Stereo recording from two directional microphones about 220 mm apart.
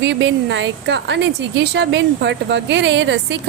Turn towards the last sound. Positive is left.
turn(degrees=-55)  # may be behind; listen again after turning